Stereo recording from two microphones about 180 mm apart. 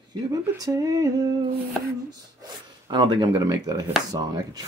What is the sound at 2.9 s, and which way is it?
Speech, 25° right (ahead or behind).